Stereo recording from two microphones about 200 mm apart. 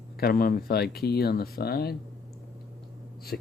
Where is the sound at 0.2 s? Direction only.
50° left (ahead or behind).